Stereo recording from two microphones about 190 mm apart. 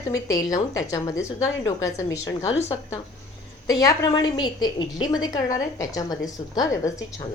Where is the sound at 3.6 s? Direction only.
20° left (ahead or behind).